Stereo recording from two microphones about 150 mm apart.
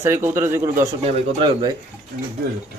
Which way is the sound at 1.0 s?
40° right (ahead or behind).